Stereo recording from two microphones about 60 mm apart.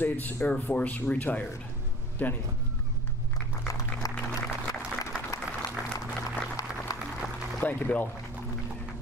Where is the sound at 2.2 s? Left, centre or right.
Left.